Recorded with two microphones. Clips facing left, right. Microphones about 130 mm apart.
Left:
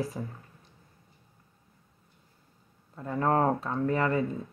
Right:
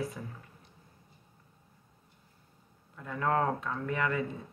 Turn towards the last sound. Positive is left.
turn(degrees=35)  # may be behind; listen again after turning